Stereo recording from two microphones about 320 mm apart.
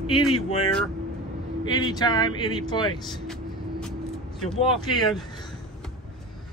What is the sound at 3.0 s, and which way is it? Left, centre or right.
Vehicle, centre.